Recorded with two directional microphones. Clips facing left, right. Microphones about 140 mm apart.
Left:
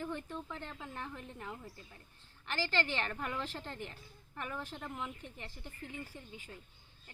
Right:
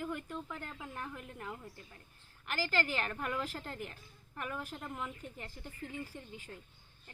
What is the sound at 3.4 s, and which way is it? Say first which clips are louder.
Speech: right 2 dB; 5° right (ahead or behind).